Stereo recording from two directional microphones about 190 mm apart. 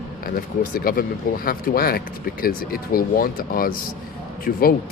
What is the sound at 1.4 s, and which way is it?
Speech, 50° left (ahead or behind).